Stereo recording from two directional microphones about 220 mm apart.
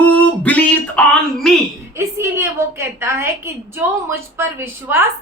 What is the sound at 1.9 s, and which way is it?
A woman's voice, 10° right (ahead or behind).